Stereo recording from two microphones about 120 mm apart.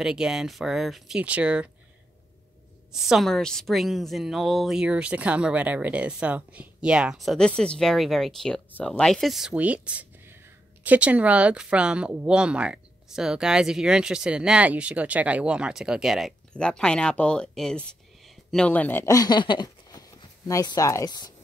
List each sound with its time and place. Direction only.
0.0 s a woman's voice: 5° right (ahead or behind)
2.9 s a woman's voice: 5° right (ahead or behind); by 19.0 s 15° left (ahead or behind)
19.0 s speech: 35° left (ahead or behind)